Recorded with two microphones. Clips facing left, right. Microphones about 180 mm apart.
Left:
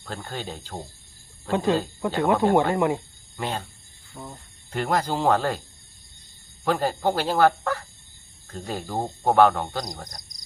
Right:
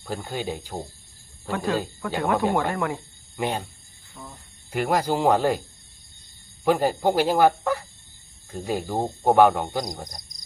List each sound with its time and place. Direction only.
0.0 s cricket: 10° right (ahead or behind)
1.5 s speech: 20° left (ahead or behind)
3.3 s cricket: 15° right (ahead or behind)
4.1 s speech: 20° left (ahead or behind)
4.7 s cricket: 10° right (ahead or behind)
6.7 s cricket: 15° right (ahead or behind)